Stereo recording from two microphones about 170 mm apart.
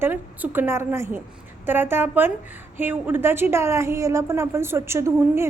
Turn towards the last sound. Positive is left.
turn(degrees=-15)  # may be behind; listen again after turning